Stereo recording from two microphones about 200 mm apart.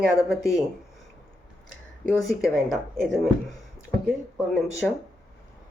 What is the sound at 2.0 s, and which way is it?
Speech, centre (ahead or behind).